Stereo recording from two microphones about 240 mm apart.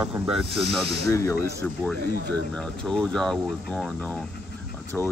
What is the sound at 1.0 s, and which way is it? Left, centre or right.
Speech, centre.